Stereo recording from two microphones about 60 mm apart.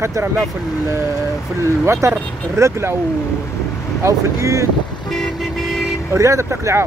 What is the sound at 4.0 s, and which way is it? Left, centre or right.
Speech, right.